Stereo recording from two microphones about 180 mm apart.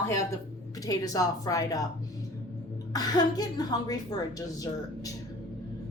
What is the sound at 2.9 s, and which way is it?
A woman's voice, 20° left (ahead or behind).